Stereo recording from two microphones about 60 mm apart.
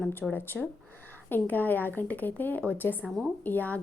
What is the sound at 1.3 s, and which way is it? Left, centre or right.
A woman's voice, left.